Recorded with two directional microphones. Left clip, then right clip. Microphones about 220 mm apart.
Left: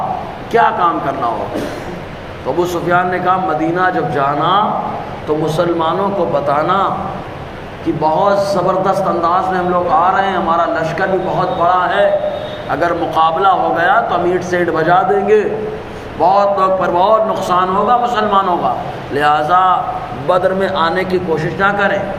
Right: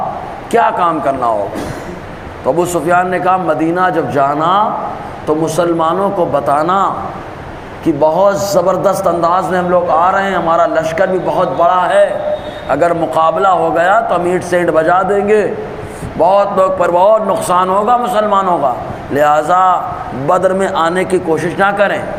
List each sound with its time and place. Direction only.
0.5 s a man's voice: 50° right (ahead or behind)
2.6 s a man's voice: 50° right (ahead or behind)
8.0 s a man's voice: 50° right (ahead or behind)